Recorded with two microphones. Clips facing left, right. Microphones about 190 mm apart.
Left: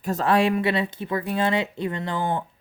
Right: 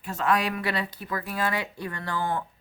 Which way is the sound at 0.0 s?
40° left (ahead or behind).